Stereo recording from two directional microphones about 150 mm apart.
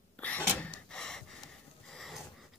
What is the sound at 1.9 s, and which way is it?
Snort, centre (ahead or behind).